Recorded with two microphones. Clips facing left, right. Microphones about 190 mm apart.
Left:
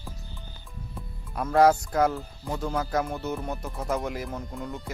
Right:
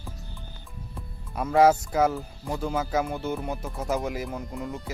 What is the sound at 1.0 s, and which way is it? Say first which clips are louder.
Speech: right 1 dB; 5° right (ahead or behind).